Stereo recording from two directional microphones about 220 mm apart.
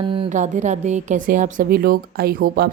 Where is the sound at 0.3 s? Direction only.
35° right (ahead or behind).